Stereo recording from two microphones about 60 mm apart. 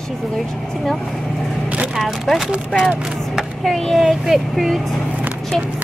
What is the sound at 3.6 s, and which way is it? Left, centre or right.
A child's voice, centre.